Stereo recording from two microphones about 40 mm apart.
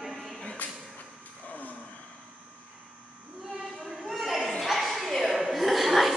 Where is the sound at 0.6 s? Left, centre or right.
Left.